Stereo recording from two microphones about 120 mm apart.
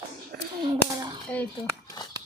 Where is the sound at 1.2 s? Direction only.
10° left (ahead or behind).